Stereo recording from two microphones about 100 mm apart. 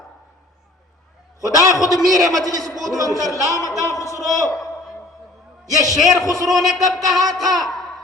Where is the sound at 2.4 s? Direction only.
40° right (ahead or behind).